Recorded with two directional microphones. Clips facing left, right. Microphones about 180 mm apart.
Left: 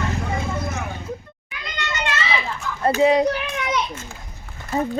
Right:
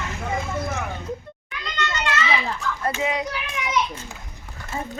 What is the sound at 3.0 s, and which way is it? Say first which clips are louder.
Speech: left 13 dB; 35° left (ahead or behind).